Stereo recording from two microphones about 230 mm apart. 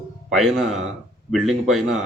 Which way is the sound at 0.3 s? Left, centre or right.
Centre.